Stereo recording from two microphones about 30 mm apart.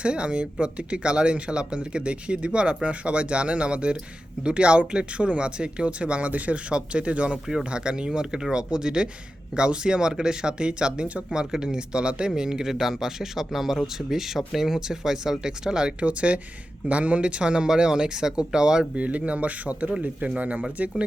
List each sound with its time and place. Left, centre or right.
0.0 s speech: right
6.7 s speech: right
12.3 s speech: right
12.6 s speech: centre; by 17.4 s right
17.4 s speech: right
18.9 s speech: right
20.0 s speech: right
20.4 s speech: right